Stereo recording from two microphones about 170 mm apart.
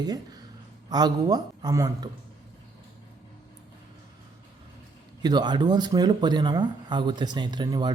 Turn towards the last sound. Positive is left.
turn(degrees=-25)  # may be behind; listen again after turning